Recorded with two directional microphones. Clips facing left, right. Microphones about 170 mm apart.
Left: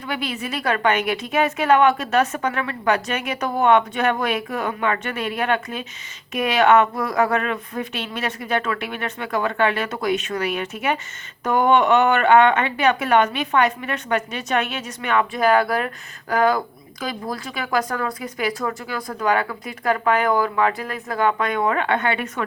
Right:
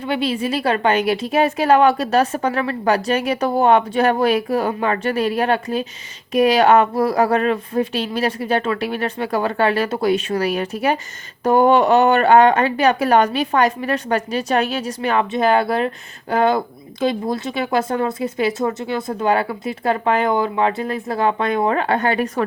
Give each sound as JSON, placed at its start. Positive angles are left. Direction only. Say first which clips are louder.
{"t": 0.0, "sound": "a woman's voice", "louder": "right 7 dB", "side_deg": -30}